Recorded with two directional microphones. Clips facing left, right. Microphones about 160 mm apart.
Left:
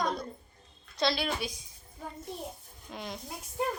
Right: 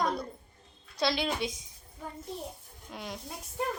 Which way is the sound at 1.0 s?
15° right (ahead or behind).